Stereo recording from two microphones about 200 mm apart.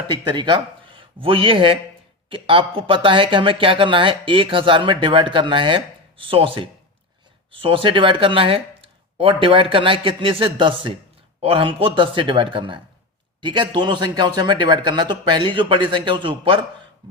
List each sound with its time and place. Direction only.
0.1 s speech: 20° right (ahead or behind)